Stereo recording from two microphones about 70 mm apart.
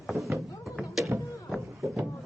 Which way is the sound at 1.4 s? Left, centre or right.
Centre.